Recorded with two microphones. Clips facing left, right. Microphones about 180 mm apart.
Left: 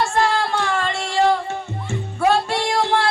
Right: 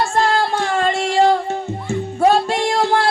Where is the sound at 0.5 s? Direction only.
40° right (ahead or behind).